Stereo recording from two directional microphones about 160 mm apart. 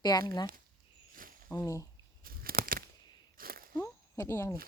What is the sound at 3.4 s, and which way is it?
Biting, 65° right (ahead or behind).